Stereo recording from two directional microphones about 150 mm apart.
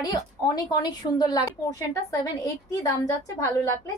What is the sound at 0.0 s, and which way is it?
A woman's voice, 25° left (ahead or behind).